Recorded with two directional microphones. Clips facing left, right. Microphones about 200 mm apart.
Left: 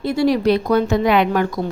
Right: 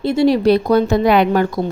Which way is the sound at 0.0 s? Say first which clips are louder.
Right 3 dB; 25° right (ahead or behind).